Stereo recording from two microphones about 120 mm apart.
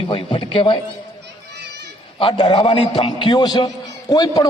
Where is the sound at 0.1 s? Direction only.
45° left (ahead or behind).